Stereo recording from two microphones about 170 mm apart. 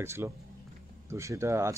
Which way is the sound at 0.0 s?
15° right (ahead or behind).